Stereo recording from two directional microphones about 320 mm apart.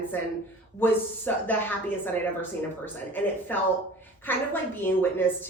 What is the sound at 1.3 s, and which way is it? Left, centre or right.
A woman's voice, centre.